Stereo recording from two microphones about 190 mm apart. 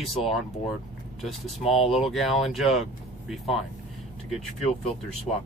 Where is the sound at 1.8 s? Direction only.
30° left (ahead or behind).